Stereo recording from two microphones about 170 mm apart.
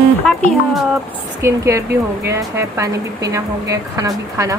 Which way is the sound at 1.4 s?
15° right (ahead or behind).